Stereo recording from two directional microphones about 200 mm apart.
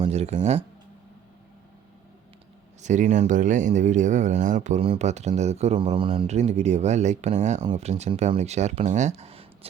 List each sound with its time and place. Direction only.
0.0 s speech: 30° right (ahead or behind)
2.8 s speech: 35° right (ahead or behind)